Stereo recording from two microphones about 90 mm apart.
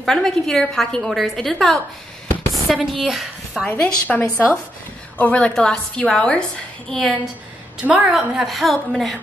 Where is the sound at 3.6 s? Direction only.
20° left (ahead or behind); by 7.1 s 5° left (ahead or behind).